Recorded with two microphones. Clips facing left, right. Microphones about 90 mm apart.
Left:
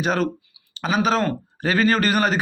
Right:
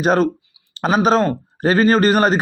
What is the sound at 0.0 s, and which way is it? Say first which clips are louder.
A man's voice: right 6 dB; 40° right (ahead or behind).